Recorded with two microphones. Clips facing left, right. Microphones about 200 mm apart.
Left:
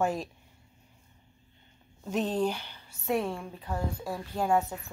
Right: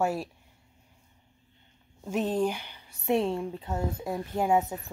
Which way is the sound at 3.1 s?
25° right (ahead or behind).